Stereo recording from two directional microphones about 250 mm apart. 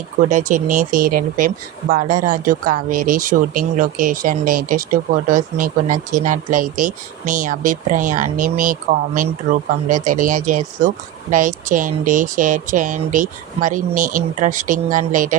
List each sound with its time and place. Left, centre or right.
0.3 s speech: right